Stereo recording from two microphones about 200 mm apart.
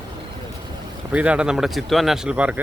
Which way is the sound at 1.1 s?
5° right (ahead or behind).